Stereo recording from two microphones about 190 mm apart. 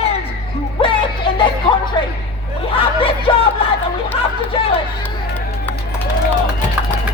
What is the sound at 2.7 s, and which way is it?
Snicker, 30° left (ahead or behind).